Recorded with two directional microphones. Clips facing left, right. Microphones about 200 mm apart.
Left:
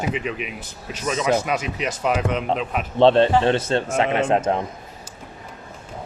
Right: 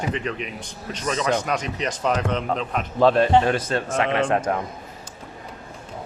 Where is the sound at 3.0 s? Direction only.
25° left (ahead or behind).